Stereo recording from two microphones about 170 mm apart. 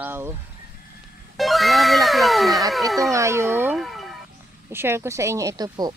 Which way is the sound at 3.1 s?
15° right (ahead or behind).